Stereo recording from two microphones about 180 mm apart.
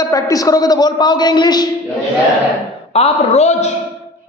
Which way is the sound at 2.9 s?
35° left (ahead or behind).